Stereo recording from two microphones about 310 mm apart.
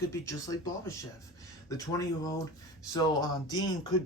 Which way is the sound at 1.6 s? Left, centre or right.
Centre.